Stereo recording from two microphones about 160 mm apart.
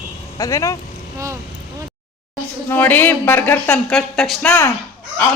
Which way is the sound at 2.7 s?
10° left (ahead or behind).